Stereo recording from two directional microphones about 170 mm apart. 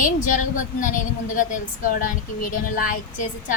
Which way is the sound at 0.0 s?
50° left (ahead or behind).